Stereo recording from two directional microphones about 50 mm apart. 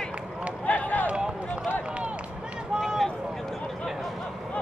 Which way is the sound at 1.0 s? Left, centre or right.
Centre.